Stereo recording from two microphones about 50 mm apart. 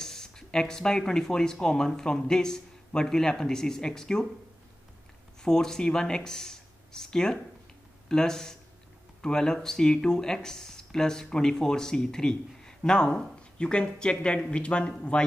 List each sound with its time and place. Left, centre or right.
0.0 s speech: centre
5.4 s speech: centre